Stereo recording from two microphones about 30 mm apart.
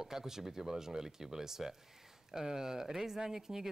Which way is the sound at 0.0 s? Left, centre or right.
Centre.